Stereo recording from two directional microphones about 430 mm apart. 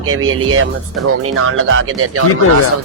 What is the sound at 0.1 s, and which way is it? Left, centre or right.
Speech, right.